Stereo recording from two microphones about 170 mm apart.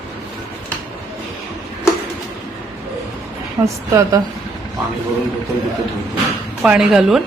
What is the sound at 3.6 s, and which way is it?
Speech, 20° right (ahead or behind).